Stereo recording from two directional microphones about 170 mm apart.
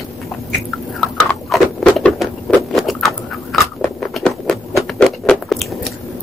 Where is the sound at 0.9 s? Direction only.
5° left (ahead or behind).